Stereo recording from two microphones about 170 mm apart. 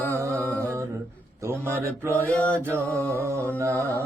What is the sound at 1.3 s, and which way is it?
Speech, 15° right (ahead or behind).